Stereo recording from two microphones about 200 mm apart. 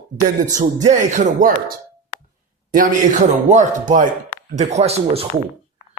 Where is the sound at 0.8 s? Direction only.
35° right (ahead or behind).